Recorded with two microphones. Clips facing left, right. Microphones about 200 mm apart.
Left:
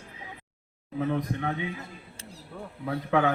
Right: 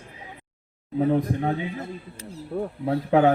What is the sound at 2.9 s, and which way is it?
Speech, 30° right (ahead or behind).